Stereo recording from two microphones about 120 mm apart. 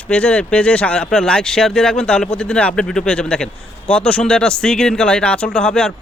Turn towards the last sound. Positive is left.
turn(degrees=5)  # may be behind; listen again after turning